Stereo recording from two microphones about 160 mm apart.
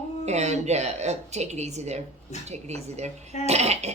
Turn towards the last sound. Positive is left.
turn(degrees=-45)  # may be behind; listen again after turning